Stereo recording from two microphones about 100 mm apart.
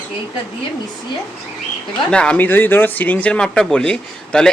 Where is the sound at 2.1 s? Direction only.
10° left (ahead or behind).